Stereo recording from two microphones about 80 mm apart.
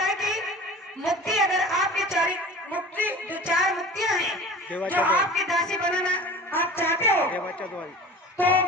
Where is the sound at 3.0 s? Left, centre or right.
Right.